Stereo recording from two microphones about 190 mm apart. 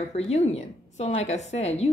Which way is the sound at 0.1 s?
35° left (ahead or behind).